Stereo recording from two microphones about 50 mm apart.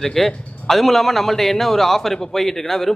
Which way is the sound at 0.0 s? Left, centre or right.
Centre.